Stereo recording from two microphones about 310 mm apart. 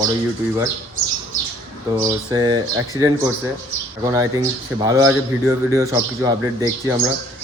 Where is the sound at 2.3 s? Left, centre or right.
Centre.